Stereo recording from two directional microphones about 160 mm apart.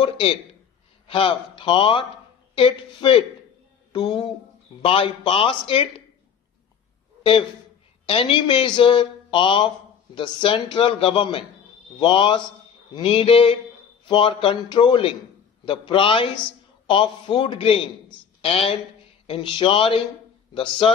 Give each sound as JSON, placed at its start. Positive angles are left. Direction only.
{"t": 0.0, "sound": "a man's voice", "side_deg": 35}
{"t": 8.1, "sound": "a woman's voice", "side_deg": 35}